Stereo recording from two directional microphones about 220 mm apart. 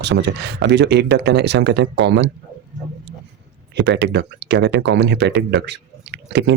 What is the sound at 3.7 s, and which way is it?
Speech, 50° right (ahead or behind).